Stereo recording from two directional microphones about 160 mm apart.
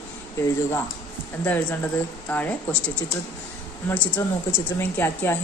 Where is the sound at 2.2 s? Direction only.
10° left (ahead or behind).